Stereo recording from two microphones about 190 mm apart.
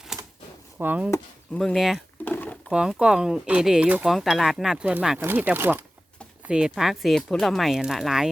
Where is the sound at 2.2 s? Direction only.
10° left (ahead or behind).